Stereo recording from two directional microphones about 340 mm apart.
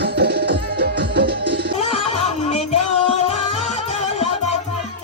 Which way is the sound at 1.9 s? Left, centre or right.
Centre.